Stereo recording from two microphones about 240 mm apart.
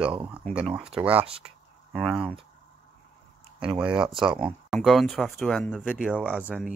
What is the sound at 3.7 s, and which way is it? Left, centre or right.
Speech, centre.